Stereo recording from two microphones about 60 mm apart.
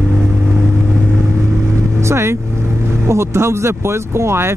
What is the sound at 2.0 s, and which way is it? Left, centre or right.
Vehicle, right.